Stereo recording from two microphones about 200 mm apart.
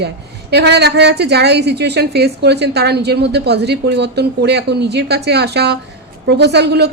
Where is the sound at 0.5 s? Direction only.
55° right (ahead or behind).